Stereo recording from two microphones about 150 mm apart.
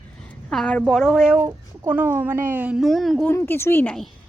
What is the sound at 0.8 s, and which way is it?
Speech, centre (ahead or behind).